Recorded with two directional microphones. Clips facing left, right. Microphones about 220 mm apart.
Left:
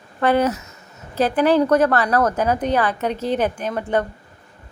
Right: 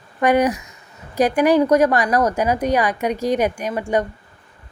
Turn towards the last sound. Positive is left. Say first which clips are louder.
# right 1 dB
turn(degrees=-10)  # may be behind; listen again after turning